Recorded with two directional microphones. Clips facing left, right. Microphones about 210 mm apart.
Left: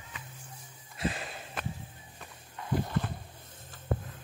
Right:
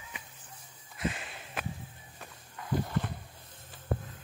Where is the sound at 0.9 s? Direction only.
35° left (ahead or behind).